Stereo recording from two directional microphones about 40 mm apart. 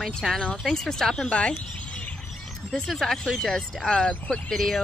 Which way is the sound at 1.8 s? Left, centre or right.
Left.